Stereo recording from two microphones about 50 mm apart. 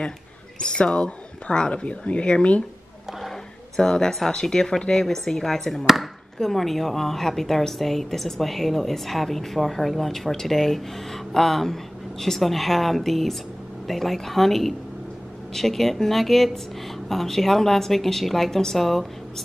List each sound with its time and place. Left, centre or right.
0.6 s speech: centre
3.1 s speech: centre